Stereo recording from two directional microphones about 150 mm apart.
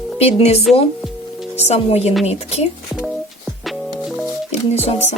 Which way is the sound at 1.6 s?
45° left (ahead or behind).